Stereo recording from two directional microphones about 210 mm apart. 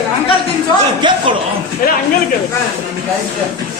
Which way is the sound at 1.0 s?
20° right (ahead or behind).